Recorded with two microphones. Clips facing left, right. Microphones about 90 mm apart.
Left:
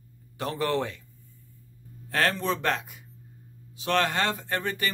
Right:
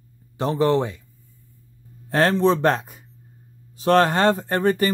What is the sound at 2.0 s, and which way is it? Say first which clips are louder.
Speech: right 8 dB; 30° right (ahead or behind).